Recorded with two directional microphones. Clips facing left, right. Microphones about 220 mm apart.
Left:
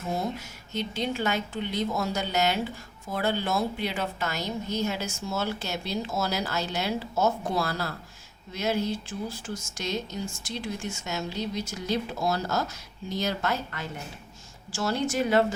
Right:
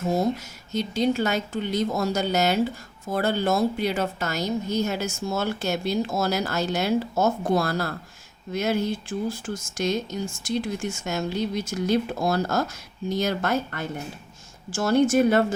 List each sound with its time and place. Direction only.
0.1 s a woman's voice: 40° right (ahead or behind)
11.0 s a woman's voice: 50° right (ahead or behind)